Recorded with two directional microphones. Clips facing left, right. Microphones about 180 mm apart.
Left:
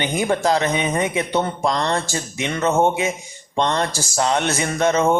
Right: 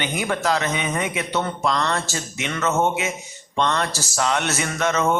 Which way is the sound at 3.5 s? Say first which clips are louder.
Left 2 dB; 25° left (ahead or behind).